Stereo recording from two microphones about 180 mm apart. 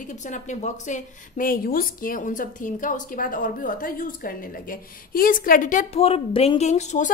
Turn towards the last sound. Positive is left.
turn(degrees=40)  # may be behind; listen again after turning